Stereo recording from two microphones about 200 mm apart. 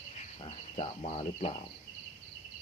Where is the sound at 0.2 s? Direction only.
30° left (ahead or behind).